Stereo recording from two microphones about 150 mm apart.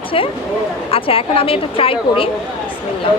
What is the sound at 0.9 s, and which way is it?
A woman's voice, 40° left (ahead or behind).